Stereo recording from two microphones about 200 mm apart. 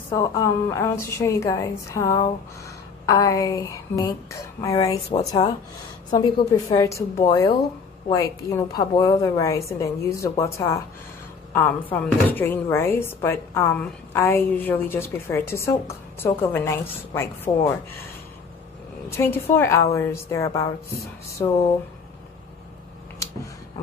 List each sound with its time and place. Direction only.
0.1 s speech: 15° left (ahead or behind)
6.0 s speech: 20° left (ahead or behind)
19.0 s speech: 10° left (ahead or behind)